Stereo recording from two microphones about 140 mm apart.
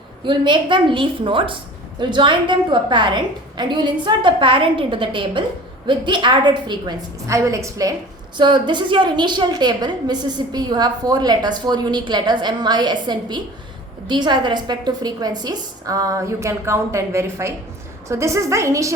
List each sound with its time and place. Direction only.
0.3 s a woman's voice: 35° right (ahead or behind)